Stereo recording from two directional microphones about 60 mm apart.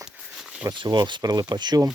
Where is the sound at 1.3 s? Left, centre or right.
Right.